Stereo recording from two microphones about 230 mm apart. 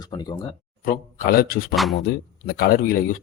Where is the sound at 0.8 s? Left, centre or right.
Left.